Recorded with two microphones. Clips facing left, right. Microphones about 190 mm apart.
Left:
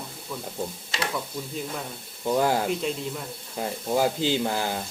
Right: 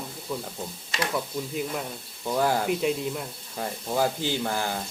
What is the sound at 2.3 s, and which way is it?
Speech, 20° left (ahead or behind).